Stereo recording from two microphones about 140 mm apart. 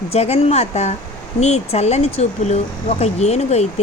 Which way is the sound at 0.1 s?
45° left (ahead or behind).